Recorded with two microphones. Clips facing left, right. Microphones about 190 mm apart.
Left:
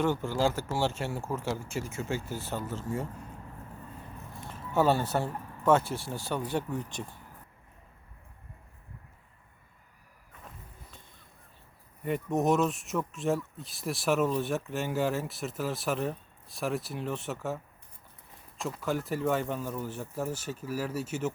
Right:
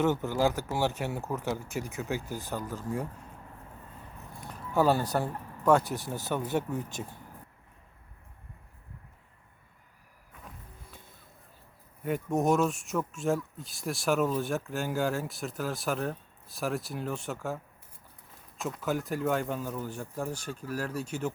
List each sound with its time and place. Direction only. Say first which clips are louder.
0.0 s speech: right 1 dB; 20° right (ahead or behind)
5.0 s speech: even; 15° right (ahead or behind)
6.7 s speech: right 1 dB; centre (ahead or behind)
12.0 s speech: even; centre (ahead or behind)